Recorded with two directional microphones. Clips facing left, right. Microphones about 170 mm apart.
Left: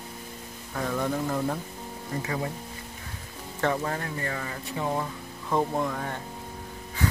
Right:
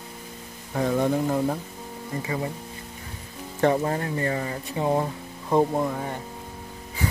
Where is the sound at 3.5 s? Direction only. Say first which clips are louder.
Right 6 dB; 25° right (ahead or behind).